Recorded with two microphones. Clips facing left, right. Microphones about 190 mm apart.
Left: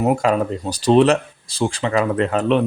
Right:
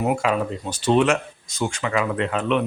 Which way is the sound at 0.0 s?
40° left (ahead or behind).